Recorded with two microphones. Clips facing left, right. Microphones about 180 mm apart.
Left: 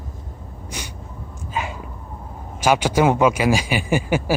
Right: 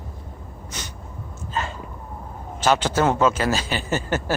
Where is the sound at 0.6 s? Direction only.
10° left (ahead or behind).